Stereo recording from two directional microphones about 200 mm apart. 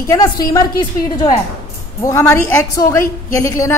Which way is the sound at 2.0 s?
15° left (ahead or behind).